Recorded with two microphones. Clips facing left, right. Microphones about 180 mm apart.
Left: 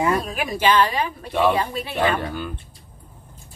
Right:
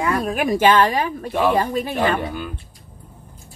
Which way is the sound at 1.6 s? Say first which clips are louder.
Right 5 dB; 45° right (ahead or behind).